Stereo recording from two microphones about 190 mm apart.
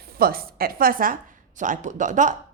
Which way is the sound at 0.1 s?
50° right (ahead or behind).